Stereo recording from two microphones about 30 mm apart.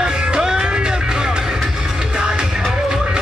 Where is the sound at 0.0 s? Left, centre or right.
Right.